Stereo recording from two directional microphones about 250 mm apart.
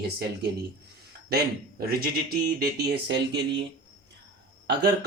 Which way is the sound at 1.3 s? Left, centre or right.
Right.